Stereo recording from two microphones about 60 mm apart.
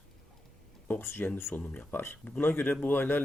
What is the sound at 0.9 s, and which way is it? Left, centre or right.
Speech, left.